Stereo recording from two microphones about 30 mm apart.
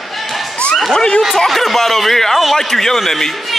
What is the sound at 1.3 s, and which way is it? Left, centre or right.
A man's voice, centre.